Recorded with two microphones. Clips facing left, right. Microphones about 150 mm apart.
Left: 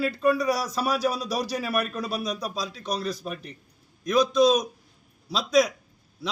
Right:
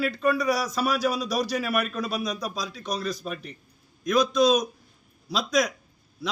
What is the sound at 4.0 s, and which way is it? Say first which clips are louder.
A man's voice: left 1 dB; 30° left (ahead or behind).